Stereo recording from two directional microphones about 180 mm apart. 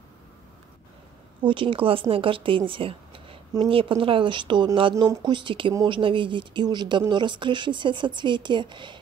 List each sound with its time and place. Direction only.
1.4 s speech: 30° right (ahead or behind)